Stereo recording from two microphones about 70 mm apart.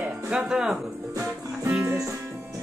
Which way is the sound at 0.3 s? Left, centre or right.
Centre.